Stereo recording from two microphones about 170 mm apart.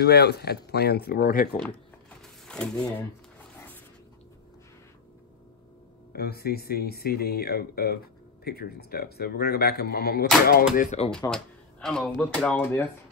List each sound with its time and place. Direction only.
0.0 s speech: 70° left (ahead or behind); by 1.6 s 55° left (ahead or behind)
1.6 s a sound: 5° left (ahead or behind)
6.1 s speech: 65° left (ahead or behind); by 11.1 s 45° left (ahead or behind)
11.1 s speech: 5° left (ahead or behind)